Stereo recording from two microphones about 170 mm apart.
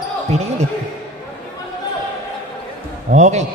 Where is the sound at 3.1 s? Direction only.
45° right (ahead or behind).